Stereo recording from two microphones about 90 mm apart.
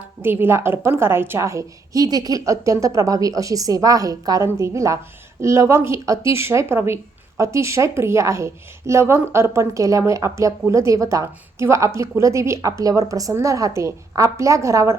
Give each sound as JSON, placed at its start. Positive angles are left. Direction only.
{"t": 0.2, "sound": "a woman's voice", "side_deg": -25}